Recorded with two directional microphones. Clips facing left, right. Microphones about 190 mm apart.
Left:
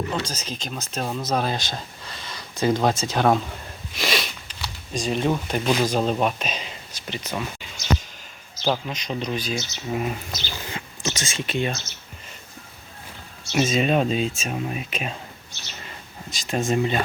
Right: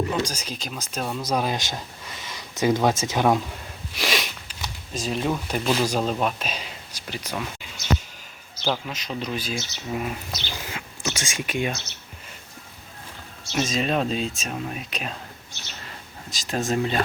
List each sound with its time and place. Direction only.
0.1 s speech: 10° right (ahead or behind)
3.9 s sniff: 10° right (ahead or behind)
4.9 s speech: centre (ahead or behind)
8.6 s speech: centre (ahead or behind)
13.5 s speech: 5° left (ahead or behind)
16.3 s speech: centre (ahead or behind)